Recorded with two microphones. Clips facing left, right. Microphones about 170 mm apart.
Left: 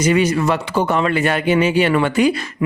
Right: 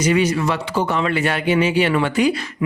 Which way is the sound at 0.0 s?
50° left (ahead or behind).